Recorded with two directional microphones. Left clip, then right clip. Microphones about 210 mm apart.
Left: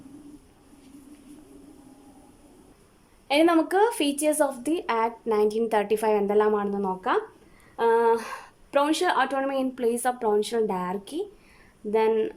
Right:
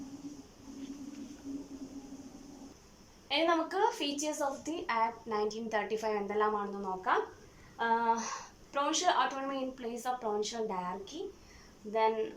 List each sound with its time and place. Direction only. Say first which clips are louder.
3.2 s a woman's voice: left 9 dB; 55° left (ahead or behind)